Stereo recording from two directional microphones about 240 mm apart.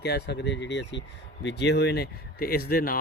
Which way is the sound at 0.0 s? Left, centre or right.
Left.